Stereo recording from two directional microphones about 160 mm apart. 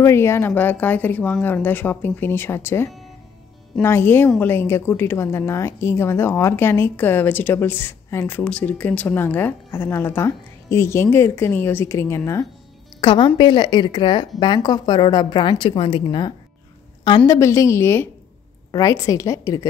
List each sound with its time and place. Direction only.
0.0 s a woman's voice: 15° left (ahead or behind)
13.0 s a woman's voice: 30° left (ahead or behind)
17.3 s a woman's voice: 20° left (ahead or behind)